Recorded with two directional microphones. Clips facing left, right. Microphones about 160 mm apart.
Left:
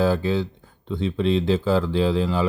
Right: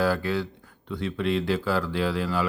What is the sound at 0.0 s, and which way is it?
Speech, 25° left (ahead or behind).